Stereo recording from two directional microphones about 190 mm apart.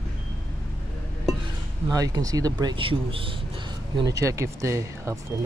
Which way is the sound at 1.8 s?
20° right (ahead or behind).